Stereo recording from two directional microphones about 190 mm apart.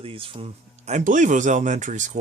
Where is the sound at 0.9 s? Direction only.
40° right (ahead or behind).